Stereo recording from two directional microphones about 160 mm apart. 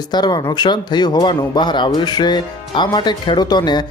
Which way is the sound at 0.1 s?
25° left (ahead or behind).